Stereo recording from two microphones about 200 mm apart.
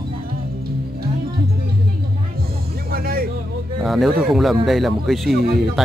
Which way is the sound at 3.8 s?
Centre (ahead or behind).